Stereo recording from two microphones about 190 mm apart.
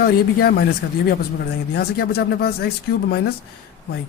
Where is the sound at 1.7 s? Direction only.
55° left (ahead or behind).